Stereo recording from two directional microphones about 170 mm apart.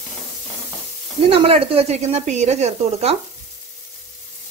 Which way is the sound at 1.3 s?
35° right (ahead or behind).